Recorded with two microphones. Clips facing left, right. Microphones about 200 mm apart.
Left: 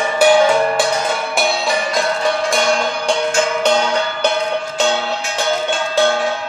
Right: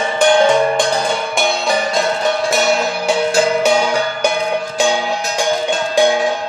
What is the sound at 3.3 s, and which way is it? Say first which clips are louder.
Music: right 3 dB; 35° right (ahead or behind).